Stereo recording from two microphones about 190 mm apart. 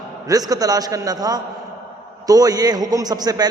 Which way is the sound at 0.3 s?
20° right (ahead or behind).